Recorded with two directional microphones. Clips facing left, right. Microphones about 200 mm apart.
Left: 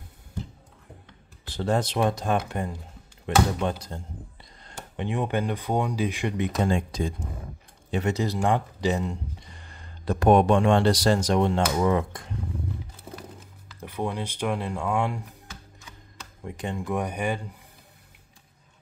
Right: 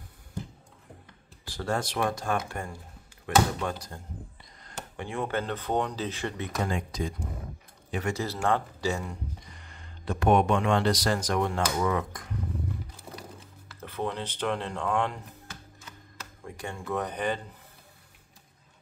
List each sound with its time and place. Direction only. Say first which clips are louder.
1.5 s speech: left 5 dB; 20° left (ahead or behind)
13.7 s speech: left 2 dB; 15° left (ahead or behind)
16.4 s speech: left 5 dB; 20° left (ahead or behind)